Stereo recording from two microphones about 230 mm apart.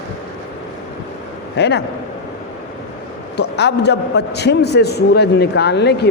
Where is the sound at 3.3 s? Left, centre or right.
Left.